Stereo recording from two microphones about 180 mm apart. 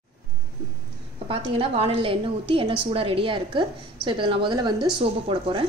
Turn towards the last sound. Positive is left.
turn(degrees=-30)  # may be behind; listen again after turning